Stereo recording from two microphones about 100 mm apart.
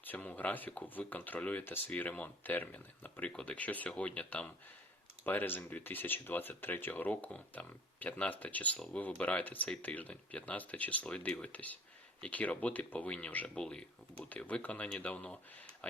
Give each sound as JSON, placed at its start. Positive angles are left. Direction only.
{"t": 0.0, "sound": "speech", "side_deg": 15}